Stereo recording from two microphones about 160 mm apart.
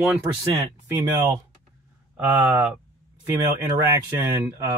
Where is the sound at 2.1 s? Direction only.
10° right (ahead or behind).